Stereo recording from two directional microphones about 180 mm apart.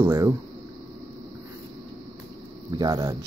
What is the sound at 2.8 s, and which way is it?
Speech, 20° right (ahead or behind).